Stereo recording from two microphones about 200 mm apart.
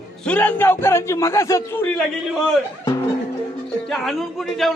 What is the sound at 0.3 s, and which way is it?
Speech, 10° left (ahead or behind).